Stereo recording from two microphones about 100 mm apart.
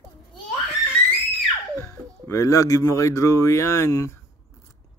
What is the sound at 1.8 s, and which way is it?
Speech, 30° left (ahead or behind).